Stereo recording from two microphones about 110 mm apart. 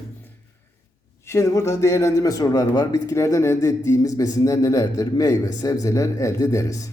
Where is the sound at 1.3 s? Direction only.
25° left (ahead or behind).